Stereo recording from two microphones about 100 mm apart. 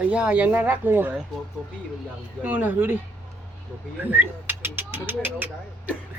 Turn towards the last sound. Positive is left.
turn(degrees=-15)  # may be behind; listen again after turning